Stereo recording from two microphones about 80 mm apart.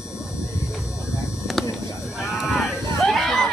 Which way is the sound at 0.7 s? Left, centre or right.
Centre.